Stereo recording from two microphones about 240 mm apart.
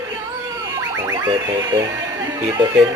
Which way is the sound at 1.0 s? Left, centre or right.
Centre.